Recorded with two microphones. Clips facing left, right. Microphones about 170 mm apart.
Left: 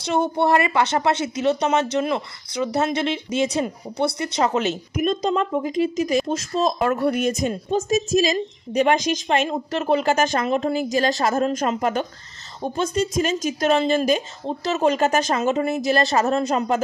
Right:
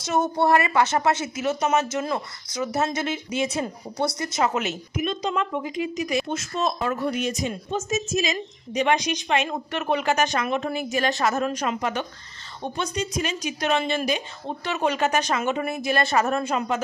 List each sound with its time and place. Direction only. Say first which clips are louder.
0.2 s speech: left 1 dB; 25° left (ahead or behind)
5.0 s a woman's voice: left 5 dB; 45° left (ahead or behind)
6.8 s speech: left 5 dB; 55° left (ahead or behind)
7.9 s a woman's voice: left 6 dB; 35° left (ahead or behind)